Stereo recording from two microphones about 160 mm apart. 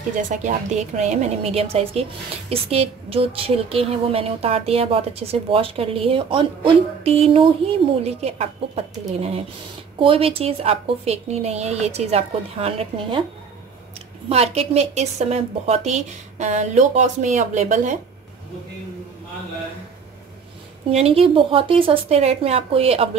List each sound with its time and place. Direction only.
0.1 s a woman's voice: 50° right (ahead or behind); by 13.2 s 35° right (ahead or behind)
14.3 s a woman's voice: 40° right (ahead or behind)
20.9 s a woman's voice: 40° right (ahead or behind)